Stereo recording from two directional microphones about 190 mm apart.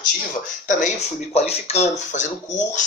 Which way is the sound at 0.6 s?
40° left (ahead or behind).